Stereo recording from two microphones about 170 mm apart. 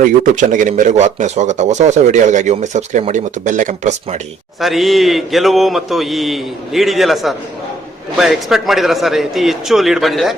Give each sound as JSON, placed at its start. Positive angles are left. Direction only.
{"t": 0.0, "sound": "speech", "side_deg": -50}
{"t": 4.6, "sound": "a man's voice", "side_deg": 0}